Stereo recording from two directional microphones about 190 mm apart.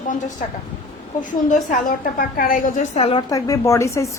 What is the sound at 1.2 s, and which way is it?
A woman's voice, 40° left (ahead or behind).